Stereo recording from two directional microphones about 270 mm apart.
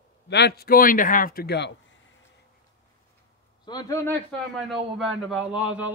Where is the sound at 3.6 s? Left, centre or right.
Centre.